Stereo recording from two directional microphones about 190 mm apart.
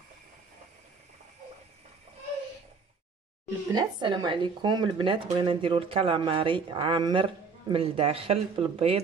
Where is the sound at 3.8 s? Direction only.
25° right (ahead or behind).